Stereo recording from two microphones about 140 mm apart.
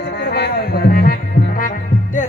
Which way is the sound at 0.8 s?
90° left.